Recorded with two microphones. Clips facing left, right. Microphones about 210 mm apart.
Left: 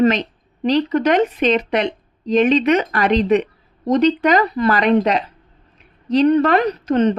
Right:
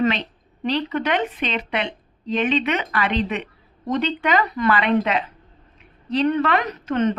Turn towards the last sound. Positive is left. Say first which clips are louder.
# left 5 dB
turn(degrees=35)  # may be behind; listen again after turning